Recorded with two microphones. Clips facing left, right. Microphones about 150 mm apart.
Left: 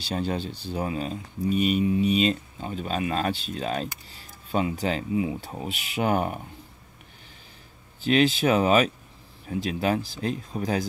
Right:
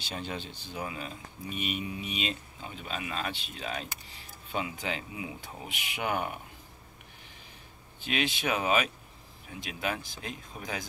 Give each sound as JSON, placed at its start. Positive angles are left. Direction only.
{"t": 0.0, "sound": "speech", "side_deg": 35}
{"t": 8.0, "sound": "speech", "side_deg": 40}